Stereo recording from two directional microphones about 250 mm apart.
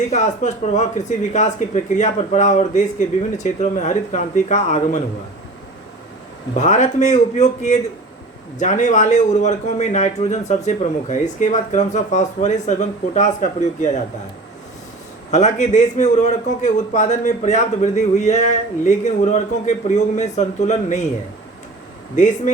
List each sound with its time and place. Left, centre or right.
0.1 s a man's voice: left
6.6 s a man's voice: left
15.3 s a man's voice: left
22.1 s a man's voice: left